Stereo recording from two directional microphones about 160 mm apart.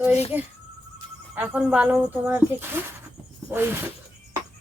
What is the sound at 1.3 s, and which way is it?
Speech, 10° right (ahead or behind).